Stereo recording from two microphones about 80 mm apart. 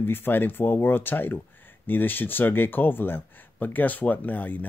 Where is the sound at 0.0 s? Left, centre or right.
Left.